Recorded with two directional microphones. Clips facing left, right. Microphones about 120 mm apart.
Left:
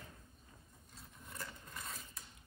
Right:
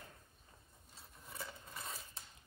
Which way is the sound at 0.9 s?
5° right (ahead or behind).